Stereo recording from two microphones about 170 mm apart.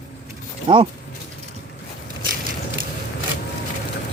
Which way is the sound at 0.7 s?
30° right (ahead or behind).